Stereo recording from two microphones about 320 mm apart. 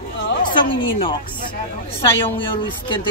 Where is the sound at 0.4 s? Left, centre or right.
Centre.